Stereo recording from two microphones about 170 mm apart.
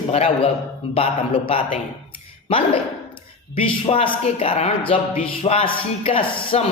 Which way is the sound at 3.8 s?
35° left (ahead or behind).